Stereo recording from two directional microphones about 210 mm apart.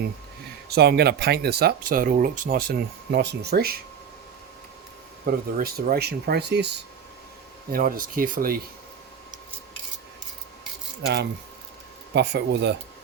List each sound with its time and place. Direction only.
0.7 s speech: 50° right (ahead or behind)
5.2 s speech: 45° right (ahead or behind)
7.7 s speech: 40° right (ahead or behind)
11.0 s speech: 55° right (ahead or behind)